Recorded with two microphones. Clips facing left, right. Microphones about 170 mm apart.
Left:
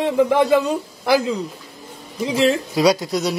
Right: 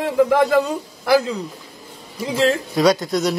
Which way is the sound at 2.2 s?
15° left (ahead or behind).